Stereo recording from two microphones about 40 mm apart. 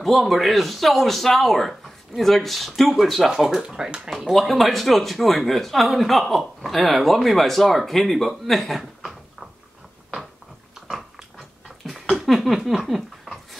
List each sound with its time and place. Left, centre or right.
0.0 s speech: centre
3.6 s speech: centre
4.1 s speech: centre
10.9 s biting: centre
11.9 s a sound: centre